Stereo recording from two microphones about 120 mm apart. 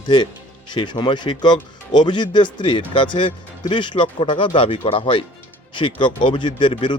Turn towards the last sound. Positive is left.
turn(degrees=45)  # may be behind; listen again after turning